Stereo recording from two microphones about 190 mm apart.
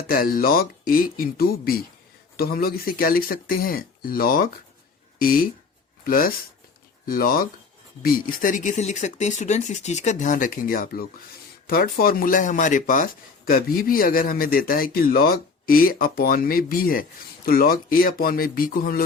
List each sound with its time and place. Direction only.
0.0 s speech: 50° left (ahead or behind)